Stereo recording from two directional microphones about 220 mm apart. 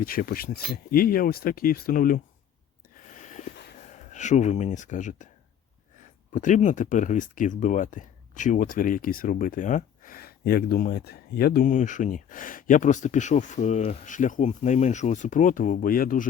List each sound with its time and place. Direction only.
0.0 s speech: 40° left (ahead or behind)
3.2 s a sound: 35° left (ahead or behind)
3.8 s speech: 35° left (ahead or behind)